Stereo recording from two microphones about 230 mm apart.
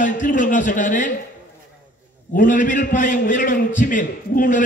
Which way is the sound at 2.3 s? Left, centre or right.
Left.